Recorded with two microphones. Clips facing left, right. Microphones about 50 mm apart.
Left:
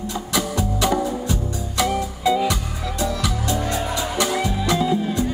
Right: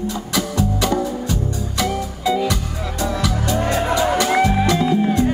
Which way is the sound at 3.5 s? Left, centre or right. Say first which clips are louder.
Right 6 dB; right.